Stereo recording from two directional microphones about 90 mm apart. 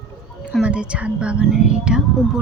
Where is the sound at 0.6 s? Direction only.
10° right (ahead or behind).